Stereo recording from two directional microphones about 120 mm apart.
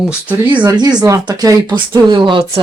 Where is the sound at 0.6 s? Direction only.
35° right (ahead or behind).